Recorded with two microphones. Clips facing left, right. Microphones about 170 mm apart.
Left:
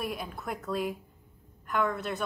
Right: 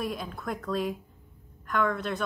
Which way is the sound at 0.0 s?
5° left (ahead or behind).